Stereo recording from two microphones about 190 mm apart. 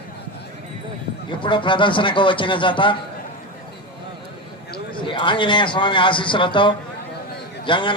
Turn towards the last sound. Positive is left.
turn(degrees=25)  # may be behind; listen again after turning